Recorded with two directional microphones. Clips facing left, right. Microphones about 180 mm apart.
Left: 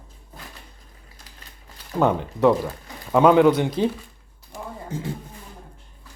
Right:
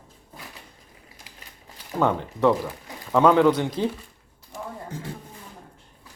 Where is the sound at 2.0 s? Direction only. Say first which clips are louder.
Left 2 dB; 10° left (ahead or behind).